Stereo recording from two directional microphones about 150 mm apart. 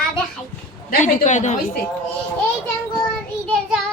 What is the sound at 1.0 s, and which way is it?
Speech, 55° left (ahead or behind).